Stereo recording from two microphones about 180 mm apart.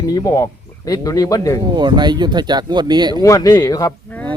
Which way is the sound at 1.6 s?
25° right (ahead or behind).